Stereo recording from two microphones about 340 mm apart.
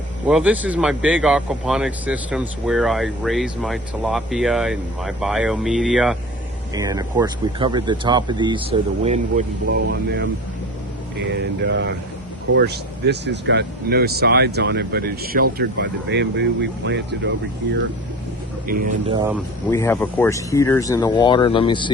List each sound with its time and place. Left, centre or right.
0.3 s a man's voice: centre; by 10.2 s right
11.3 s speech: right
18.7 s speech: right
19.7 s speech: centre